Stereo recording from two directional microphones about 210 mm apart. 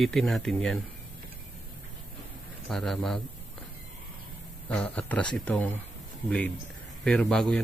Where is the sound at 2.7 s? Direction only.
Centre (ahead or behind).